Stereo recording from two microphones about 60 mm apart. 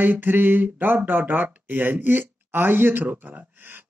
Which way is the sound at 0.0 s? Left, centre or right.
Right.